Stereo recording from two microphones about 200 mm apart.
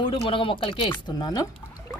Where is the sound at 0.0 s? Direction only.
25° left (ahead or behind).